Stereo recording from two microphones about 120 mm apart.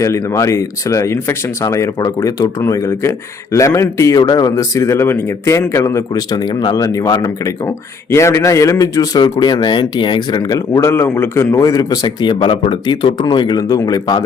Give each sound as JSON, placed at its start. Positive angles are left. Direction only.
{"t": 0.0, "sound": "a man's voice", "side_deg": 25}
{"t": 10.8, "sound": "a man's voice", "side_deg": 20}